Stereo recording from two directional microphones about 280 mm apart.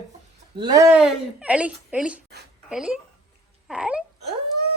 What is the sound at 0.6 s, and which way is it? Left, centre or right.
Speech, centre.